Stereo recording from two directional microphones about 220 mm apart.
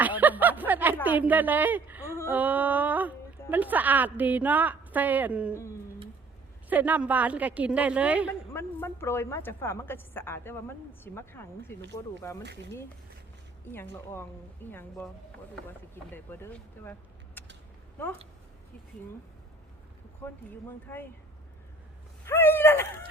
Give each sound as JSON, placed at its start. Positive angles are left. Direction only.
{"t": 0.0, "sound": "a sound", "side_deg": -10}
{"t": 1.0, "sound": "a woman's voice", "side_deg": -10}
{"t": 6.7, "sound": "a woman's voice", "side_deg": -5}
{"t": 8.5, "sound": "a woman's voice", "side_deg": 10}
{"t": 12.4, "sound": "speech", "side_deg": -50}
{"t": 13.7, "sound": "a woman's voice", "side_deg": 10}
{"t": 16.1, "sound": "a woman's voice", "side_deg": 10}
{"t": 17.4, "sound": "a sound", "side_deg": 10}
{"t": 20.9, "sound": "a woman's voice", "side_deg": 10}
{"t": 22.3, "sound": "a woman's voice", "side_deg": 10}